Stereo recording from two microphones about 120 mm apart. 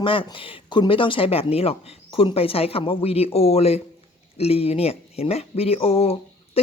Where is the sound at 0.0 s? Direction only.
45° left (ahead or behind).